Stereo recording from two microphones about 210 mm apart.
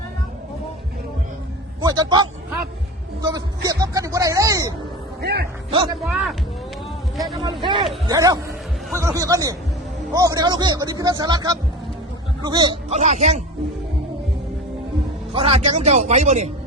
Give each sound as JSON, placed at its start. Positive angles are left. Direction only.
{"t": 1.8, "sound": "a man's voice", "side_deg": -20}
{"t": 5.2, "sound": "a man's voice", "side_deg": -50}
{"t": 6.1, "sound": "a man's voice", "side_deg": -5}
{"t": 7.4, "sound": "a man's voice", "side_deg": -20}
{"t": 12.9, "sound": "a man's voice", "side_deg": -35}
{"t": 15.3, "sound": "a man's voice", "side_deg": -30}